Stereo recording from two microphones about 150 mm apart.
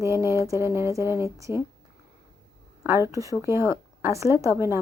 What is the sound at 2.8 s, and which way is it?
Speech, 15° right (ahead or behind).